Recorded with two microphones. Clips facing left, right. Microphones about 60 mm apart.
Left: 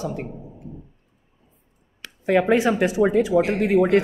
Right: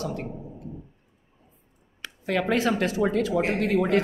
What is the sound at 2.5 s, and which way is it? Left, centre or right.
Speech, centre.